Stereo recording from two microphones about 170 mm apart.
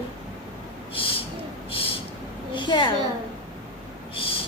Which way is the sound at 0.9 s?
30° left (ahead or behind).